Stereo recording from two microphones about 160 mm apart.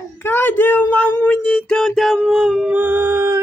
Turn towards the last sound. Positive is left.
turn(degrees=-15)  # may be behind; listen again after turning